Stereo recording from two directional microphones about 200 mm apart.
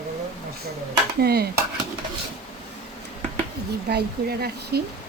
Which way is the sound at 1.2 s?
50° right (ahead or behind).